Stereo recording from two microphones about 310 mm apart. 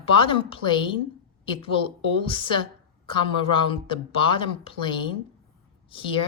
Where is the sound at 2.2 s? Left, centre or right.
Centre.